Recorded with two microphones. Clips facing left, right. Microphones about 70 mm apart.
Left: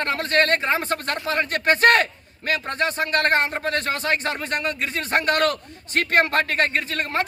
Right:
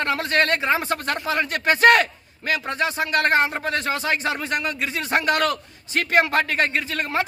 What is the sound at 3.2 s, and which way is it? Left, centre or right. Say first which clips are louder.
A man's voice: right 2 dB; centre.